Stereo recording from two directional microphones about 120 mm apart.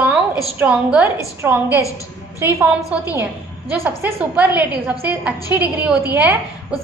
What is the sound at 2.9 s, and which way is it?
A woman's voice, 10° right (ahead or behind).